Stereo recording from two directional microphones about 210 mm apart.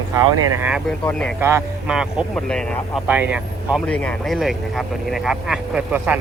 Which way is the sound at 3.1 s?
10° right (ahead or behind).